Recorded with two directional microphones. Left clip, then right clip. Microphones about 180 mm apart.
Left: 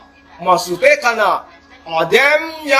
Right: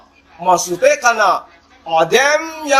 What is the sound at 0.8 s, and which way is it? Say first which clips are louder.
A man's voice: even; 30° right (ahead or behind).